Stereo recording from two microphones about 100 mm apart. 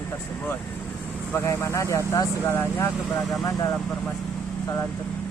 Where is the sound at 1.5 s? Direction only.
30° left (ahead or behind).